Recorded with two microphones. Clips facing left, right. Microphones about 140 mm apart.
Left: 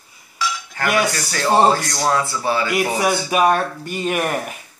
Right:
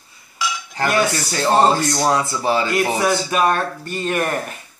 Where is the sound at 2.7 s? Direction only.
10° left (ahead or behind).